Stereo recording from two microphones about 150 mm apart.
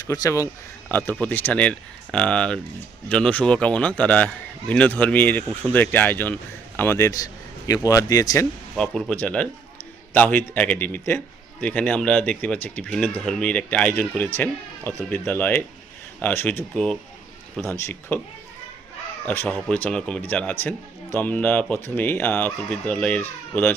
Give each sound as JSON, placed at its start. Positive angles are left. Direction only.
{"t": 0.0, "sound": "a man's voice", "side_deg": 25}
{"t": 8.7, "sound": "speech", "side_deg": 5}
{"t": 17.7, "sound": "speech", "side_deg": 15}
{"t": 19.2, "sound": "speech", "side_deg": 10}